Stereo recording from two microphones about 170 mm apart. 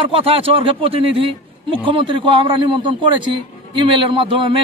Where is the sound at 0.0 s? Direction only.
35° right (ahead or behind).